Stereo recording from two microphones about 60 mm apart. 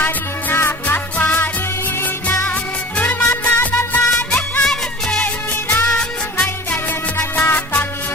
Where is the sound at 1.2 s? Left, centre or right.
Left.